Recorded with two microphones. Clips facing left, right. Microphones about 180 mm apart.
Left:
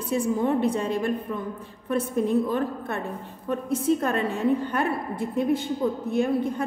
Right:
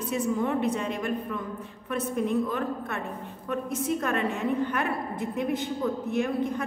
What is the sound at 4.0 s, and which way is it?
Speech, 35° left (ahead or behind).